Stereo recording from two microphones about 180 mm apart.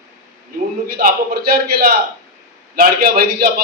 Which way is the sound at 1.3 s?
60° right (ahead or behind).